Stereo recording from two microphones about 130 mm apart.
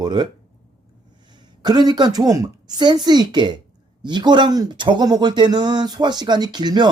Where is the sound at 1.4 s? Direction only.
35° right (ahead or behind).